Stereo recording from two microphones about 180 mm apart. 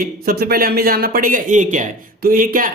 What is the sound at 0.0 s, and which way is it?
Speech, 55° right (ahead or behind).